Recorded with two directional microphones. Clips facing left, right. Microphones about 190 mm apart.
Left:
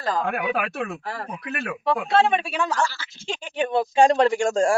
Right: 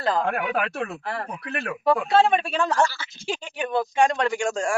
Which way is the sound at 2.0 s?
Centre (ahead or behind).